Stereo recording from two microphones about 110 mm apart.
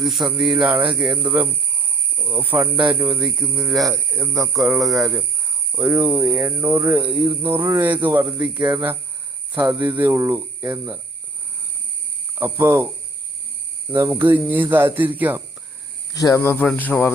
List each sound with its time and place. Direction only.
0.0 s speech: 5° right (ahead or behind); by 3.2 s 25° right (ahead or behind)
3.2 s speech: 10° right (ahead or behind)
3.6 s speech: centre (ahead or behind)
4.1 s speech: 20° right (ahead or behind)
4.5 s speech: centre (ahead or behind)
5.7 s speech: 15° right (ahead or behind)
9.8 s speech: 15° right (ahead or behind)
12.3 s speech: 20° right (ahead or behind)
14.2 s speech: 15° right (ahead or behind)
16.1 s speech: 30° left (ahead or behind)
16.6 s cricket: 15° left (ahead or behind)